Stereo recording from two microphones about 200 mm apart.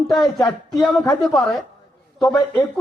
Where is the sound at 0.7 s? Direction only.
Centre (ahead or behind).